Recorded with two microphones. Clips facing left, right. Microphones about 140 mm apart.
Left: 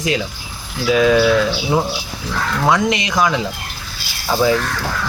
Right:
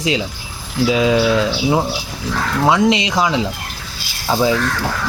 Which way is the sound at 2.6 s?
10° right (ahead or behind).